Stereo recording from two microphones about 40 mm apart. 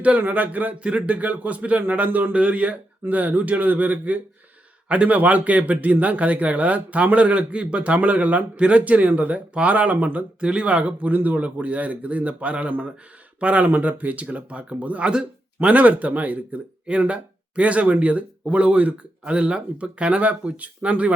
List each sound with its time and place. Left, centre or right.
0.2 s a man's voice: right
0.8 s speech: right
3.1 s a man's voice: right
10.4 s speech: right
13.7 s speech: right
15.0 s speech: right
15.6 s speech: right